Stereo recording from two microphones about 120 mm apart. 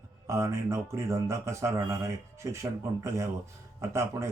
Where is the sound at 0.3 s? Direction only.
25° right (ahead or behind).